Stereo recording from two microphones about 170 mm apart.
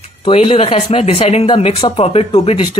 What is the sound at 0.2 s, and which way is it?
Speech, 35° left (ahead or behind).